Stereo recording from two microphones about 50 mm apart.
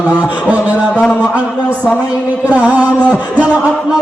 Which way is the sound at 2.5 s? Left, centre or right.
Right.